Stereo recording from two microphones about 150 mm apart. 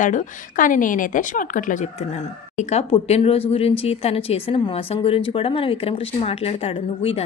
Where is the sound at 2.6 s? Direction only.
45° left (ahead or behind).